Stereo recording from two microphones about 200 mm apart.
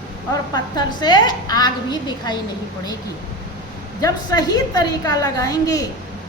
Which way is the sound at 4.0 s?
20° left (ahead or behind).